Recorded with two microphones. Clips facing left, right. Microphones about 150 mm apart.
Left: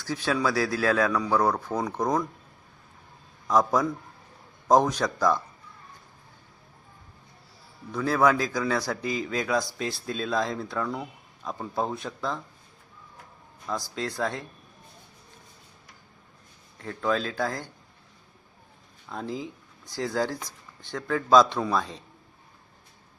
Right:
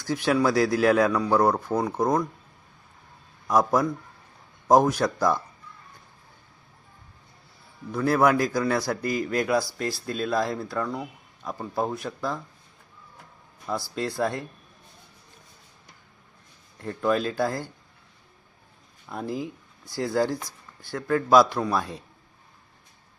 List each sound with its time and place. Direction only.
0.0 s a man's voice: 15° right (ahead or behind)
3.4 s a man's voice: 10° right (ahead or behind)
7.9 s a man's voice: 10° right (ahead or behind)
13.9 s a man's voice: 10° right (ahead or behind)
16.7 s a man's voice: 10° right (ahead or behind)
19.0 s a man's voice: 10° right (ahead or behind)